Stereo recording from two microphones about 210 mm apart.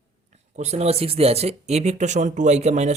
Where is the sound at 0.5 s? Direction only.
30° right (ahead or behind).